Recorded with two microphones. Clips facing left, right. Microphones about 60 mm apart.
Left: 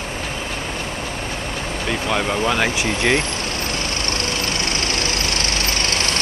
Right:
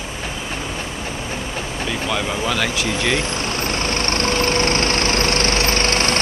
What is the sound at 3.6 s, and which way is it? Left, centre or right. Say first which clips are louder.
Vehicle: right 3 dB; right.